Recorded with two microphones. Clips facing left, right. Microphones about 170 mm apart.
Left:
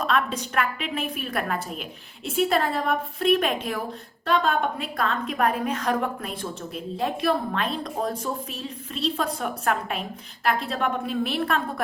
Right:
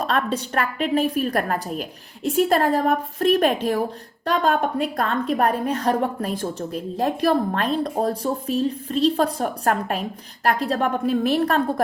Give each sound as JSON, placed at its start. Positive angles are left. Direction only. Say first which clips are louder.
{"t": 0.0, "sound": "a woman's voice", "louder": "right 2 dB", "side_deg": -35}